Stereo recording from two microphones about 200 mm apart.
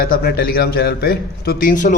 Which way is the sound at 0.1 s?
50° left (ahead or behind).